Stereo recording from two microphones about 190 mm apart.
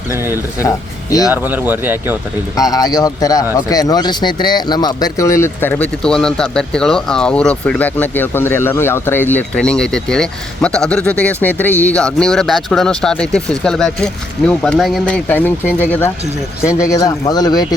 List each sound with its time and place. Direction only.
1.3 s speech: 10° right (ahead or behind)
2.6 s speech: 20° left (ahead or behind)